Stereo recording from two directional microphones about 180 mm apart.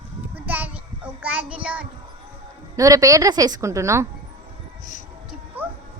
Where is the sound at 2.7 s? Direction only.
20° right (ahead or behind).